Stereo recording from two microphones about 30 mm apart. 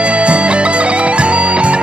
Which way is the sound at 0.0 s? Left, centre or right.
Right.